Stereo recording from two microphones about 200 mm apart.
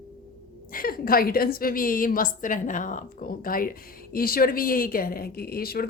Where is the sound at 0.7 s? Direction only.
45° left (ahead or behind).